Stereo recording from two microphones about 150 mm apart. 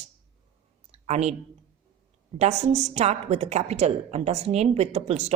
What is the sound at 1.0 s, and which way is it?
Speech, 50° right (ahead or behind).